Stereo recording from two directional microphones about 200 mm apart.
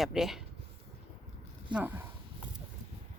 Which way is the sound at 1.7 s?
10° right (ahead or behind).